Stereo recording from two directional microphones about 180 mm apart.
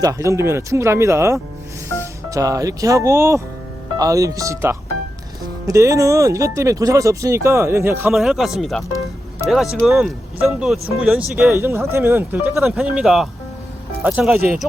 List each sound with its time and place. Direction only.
0.0 s speech: 15° right (ahead or behind)
8.1 s speech: centre (ahead or behind)